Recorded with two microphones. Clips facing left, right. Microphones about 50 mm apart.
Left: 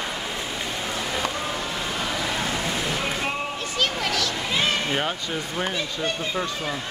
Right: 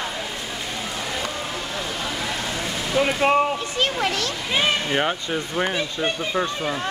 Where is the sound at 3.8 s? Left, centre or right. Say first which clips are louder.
Right 1 dB; right.